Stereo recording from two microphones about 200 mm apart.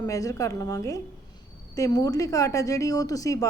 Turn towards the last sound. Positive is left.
turn(degrees=15)  # may be behind; listen again after turning